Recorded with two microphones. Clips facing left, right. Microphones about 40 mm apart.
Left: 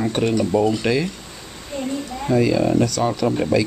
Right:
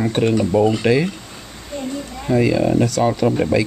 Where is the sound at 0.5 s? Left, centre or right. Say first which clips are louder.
Right 3 dB; right.